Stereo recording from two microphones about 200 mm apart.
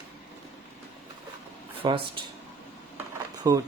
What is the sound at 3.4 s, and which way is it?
Speech, 15° right (ahead or behind).